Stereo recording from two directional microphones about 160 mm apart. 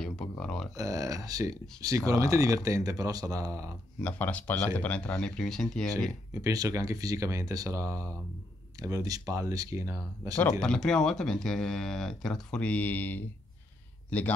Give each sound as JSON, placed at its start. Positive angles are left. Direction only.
{"t": 0.0, "sound": "a sound", "side_deg": 5}
{"t": 0.7, "sound": "speech", "side_deg": -20}
{"t": 4.0, "sound": "speech", "side_deg": 10}
{"t": 6.4, "sound": "speech", "side_deg": -20}
{"t": 10.6, "sound": "speech", "side_deg": 5}